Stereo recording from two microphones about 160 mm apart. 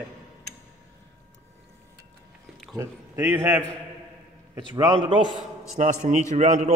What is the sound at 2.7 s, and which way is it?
A man's voice, 15° right (ahead or behind).